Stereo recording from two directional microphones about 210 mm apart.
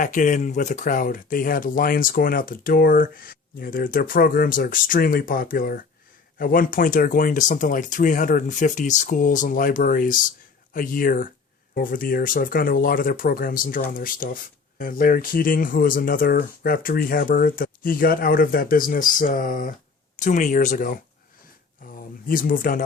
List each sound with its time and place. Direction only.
0.0 s speech: 35° left (ahead or behind)